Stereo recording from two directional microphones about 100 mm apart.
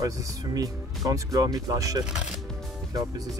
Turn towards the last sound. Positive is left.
turn(degrees=-35)  # may be behind; listen again after turning